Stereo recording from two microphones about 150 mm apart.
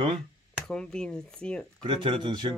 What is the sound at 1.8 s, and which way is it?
Speech, 35° right (ahead or behind).